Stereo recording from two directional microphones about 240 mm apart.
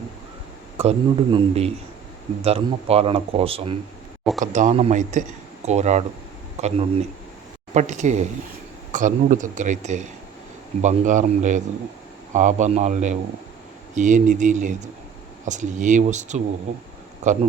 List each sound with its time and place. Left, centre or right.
0.8 s speech: right